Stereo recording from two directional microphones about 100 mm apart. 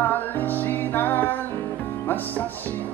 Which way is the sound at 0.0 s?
20° left (ahead or behind).